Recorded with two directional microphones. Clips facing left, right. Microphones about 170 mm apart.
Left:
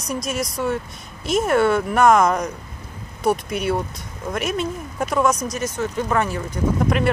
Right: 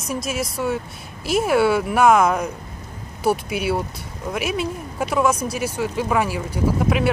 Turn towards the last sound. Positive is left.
turn(degrees=-5)  # may be behind; listen again after turning